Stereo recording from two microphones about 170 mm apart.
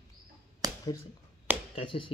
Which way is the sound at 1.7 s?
30° left (ahead or behind).